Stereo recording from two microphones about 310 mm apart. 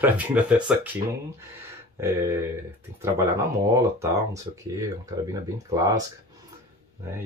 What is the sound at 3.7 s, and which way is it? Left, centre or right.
Speech, centre.